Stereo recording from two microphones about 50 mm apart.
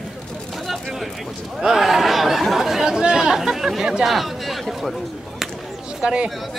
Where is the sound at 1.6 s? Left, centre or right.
Centre.